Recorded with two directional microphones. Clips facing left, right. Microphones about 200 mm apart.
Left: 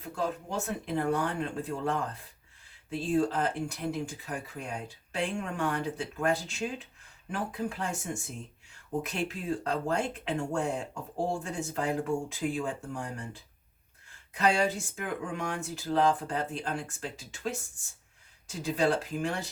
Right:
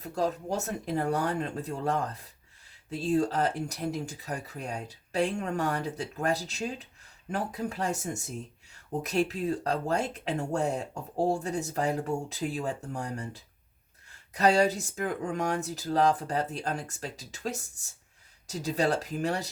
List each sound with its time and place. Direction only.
0.0 s speech: 40° right (ahead or behind)